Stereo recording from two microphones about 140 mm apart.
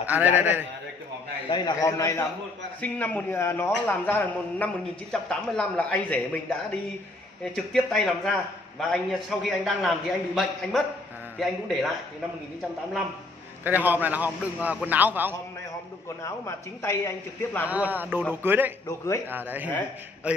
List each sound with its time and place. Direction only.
0.0 s a man's voice: 10° right (ahead or behind)
1.9 s a man's voice: 20° left (ahead or behind); by 11.9 s centre (ahead or behind)
13.7 s a man's voice: 15° right (ahead or behind)
16.2 s a man's voice: 20° left (ahead or behind)
17.6 s a man's voice: 10° right (ahead or behind)
18.9 s a man's voice: 20° left (ahead or behind)
19.2 s a man's voice: 15° right (ahead or behind)